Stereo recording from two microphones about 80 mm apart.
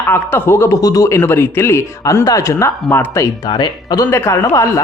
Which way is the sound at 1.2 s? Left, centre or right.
Left.